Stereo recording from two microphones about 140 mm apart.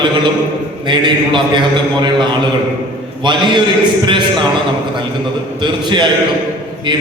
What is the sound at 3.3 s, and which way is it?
Speech, 35° right (ahead or behind).